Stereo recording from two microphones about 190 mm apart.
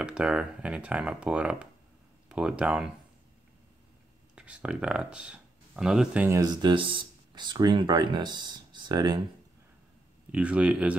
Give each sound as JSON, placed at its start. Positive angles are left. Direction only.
{"t": 0.0, "sound": "speech", "side_deg": -5}
{"t": 4.4, "sound": "speech", "side_deg": -5}
{"t": 10.3, "sound": "speech", "side_deg": -5}